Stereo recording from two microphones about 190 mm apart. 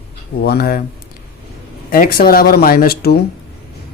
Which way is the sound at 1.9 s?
50° left (ahead or behind).